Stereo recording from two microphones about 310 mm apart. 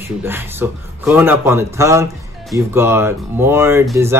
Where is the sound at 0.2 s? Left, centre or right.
Centre.